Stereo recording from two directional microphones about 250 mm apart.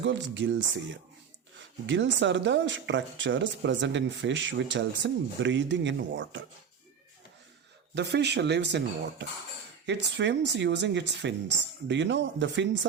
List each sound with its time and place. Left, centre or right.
0.0 s speech: right
7.9 s speech: right